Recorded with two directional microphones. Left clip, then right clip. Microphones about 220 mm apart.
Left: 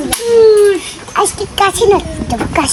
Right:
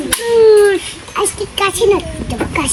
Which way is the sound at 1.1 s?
10° left (ahead or behind).